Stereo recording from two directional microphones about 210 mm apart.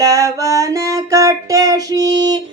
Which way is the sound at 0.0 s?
15° right (ahead or behind).